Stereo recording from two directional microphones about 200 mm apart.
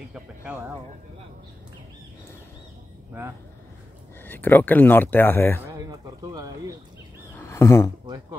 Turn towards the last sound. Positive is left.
turn(degrees=15)  # may be behind; listen again after turning